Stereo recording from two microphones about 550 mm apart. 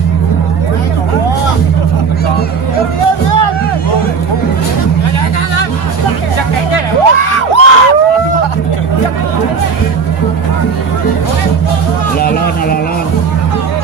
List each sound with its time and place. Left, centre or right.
7.1 s crowd: left